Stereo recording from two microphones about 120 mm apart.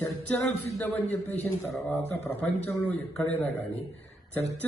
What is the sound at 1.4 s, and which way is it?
A man's voice, 15° left (ahead or behind).